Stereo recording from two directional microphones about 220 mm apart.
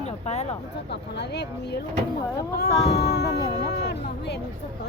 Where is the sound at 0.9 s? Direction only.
50° left (ahead or behind).